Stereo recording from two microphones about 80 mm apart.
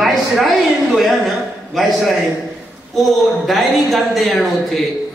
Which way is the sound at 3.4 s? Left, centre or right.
Centre.